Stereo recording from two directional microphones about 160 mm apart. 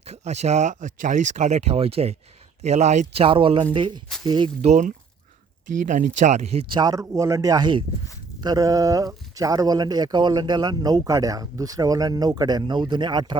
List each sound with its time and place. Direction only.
0.0 s speech: 45° right (ahead or behind)
3.2 s speech: 35° right (ahead or behind)
4.6 s speech: 50° right (ahead or behind)
6.7 s speech: 20° right (ahead or behind)